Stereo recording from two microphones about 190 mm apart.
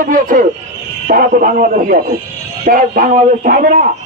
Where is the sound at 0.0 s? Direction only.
45° right (ahead or behind).